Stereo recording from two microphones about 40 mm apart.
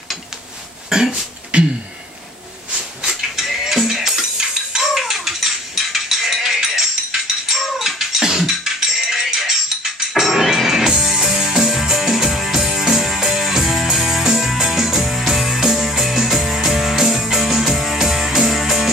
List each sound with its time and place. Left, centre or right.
0.8 s speech: centre
1.1 s a sound: right
3.3 s music: centre